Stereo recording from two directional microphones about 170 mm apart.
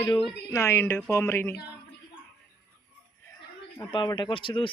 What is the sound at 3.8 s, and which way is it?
Speech, 25° left (ahead or behind).